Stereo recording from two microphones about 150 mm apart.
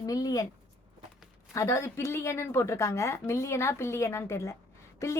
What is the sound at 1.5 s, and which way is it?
A woman's voice, 20° left (ahead or behind).